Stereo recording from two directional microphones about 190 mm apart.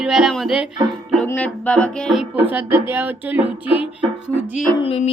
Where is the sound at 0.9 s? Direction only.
Centre (ahead or behind).